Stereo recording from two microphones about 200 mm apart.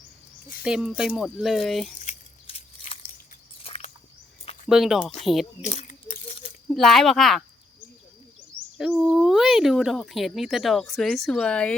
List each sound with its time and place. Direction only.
0.6 s speech: 5° right (ahead or behind)
2.0 s a sound: 30° left (ahead or behind)
4.7 s speech: centre (ahead or behind)
5.7 s crunch: 30° left (ahead or behind)
6.7 s speech: centre (ahead or behind)
8.8 s speech: centre (ahead or behind)